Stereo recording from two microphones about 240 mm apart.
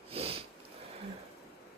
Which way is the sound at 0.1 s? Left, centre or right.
Right.